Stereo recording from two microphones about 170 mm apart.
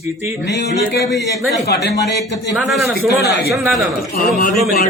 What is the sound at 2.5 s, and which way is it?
Speech, centre (ahead or behind).